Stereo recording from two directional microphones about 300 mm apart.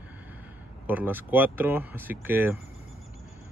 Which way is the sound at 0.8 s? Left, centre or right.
Centre.